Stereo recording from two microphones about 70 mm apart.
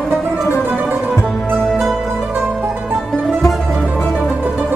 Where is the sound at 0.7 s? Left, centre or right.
Right.